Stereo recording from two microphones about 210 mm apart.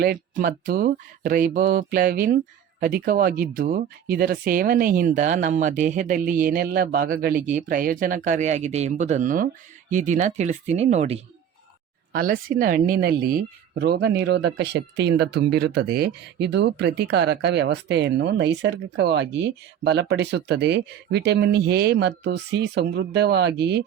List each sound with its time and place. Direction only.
0.0 s speech: 45° right (ahead or behind)
12.1 s speech: 45° right (ahead or behind)